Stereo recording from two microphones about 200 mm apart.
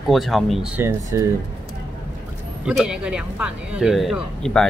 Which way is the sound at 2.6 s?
5° right (ahead or behind).